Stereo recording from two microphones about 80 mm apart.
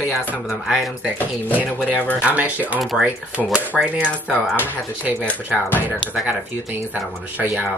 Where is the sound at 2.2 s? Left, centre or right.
Centre.